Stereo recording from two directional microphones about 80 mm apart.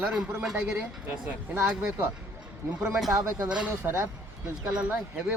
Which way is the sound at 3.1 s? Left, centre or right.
Right.